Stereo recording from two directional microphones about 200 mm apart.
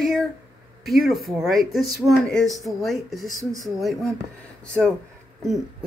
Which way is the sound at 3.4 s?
15° right (ahead or behind).